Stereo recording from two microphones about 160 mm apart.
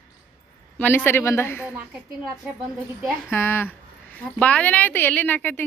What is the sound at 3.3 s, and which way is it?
A woman's voice, 15° left (ahead or behind).